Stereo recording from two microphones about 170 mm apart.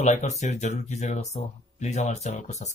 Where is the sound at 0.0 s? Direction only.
45° left (ahead or behind).